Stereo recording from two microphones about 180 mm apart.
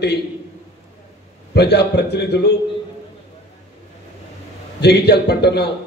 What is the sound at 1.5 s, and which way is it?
A man's voice, 65° left (ahead or behind).